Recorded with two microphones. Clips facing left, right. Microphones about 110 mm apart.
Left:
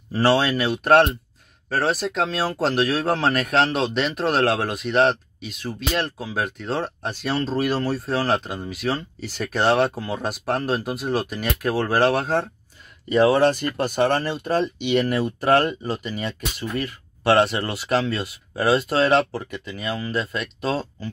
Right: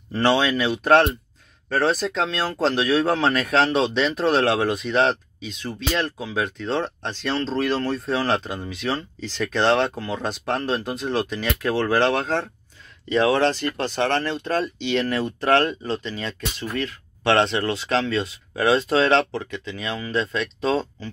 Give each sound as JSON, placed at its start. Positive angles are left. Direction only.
{"t": 0.1, "sound": "speech", "side_deg": 5}